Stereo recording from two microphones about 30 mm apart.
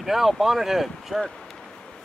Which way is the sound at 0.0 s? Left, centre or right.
Centre.